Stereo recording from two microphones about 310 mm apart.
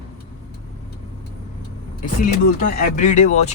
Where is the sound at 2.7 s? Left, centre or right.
Left.